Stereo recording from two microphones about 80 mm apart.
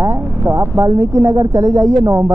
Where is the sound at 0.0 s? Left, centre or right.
Right.